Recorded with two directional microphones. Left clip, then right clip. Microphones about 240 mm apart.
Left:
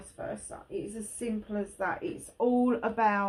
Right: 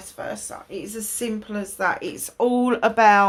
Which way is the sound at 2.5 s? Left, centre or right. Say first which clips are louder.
Right 9 dB; right.